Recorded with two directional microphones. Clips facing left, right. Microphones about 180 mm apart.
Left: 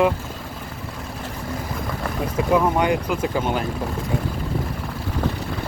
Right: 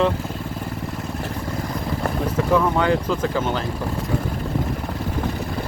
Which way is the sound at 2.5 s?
15° left (ahead or behind).